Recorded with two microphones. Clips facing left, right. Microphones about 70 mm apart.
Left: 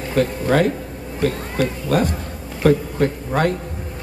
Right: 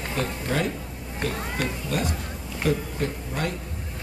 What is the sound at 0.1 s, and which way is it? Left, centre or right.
A man's voice, left.